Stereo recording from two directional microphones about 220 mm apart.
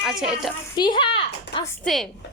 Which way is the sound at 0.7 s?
20° left (ahead or behind).